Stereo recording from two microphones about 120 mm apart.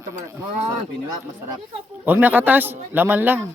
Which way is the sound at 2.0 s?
15° right (ahead or behind).